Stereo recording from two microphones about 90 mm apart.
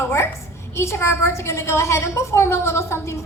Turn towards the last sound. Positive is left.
turn(degrees=30)  # may be behind; listen again after turning